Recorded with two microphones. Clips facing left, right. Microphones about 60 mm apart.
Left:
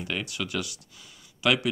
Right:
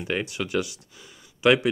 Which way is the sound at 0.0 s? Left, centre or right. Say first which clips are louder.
Right 4 dB; right.